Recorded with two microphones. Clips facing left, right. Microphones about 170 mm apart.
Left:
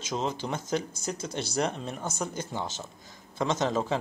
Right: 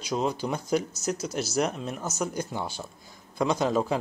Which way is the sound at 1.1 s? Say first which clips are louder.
Right 4 dB; 5° right (ahead or behind).